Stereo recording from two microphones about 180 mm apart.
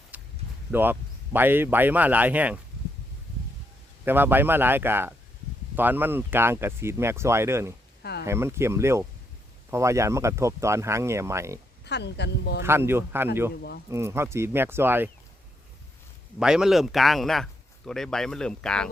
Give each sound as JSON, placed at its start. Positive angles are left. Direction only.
{"t": 0.1, "sound": "a sound", "side_deg": -10}
{"t": 0.7, "sound": "speech", "side_deg": -10}
{"t": 4.0, "sound": "speech", "side_deg": -10}
{"t": 11.9, "sound": "speech", "side_deg": 70}
{"t": 12.6, "sound": "speech", "side_deg": -15}
{"t": 13.6, "sound": "speech", "side_deg": 60}
{"t": 13.9, "sound": "speech", "side_deg": -15}
{"t": 16.4, "sound": "speech", "side_deg": -5}